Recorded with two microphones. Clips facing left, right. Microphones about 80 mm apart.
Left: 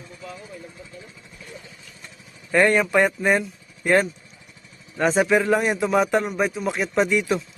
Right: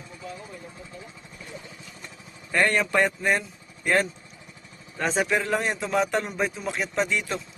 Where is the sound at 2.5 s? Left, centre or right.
Centre.